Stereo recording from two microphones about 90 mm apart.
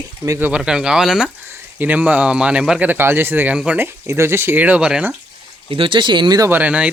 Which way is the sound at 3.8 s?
30° right (ahead or behind).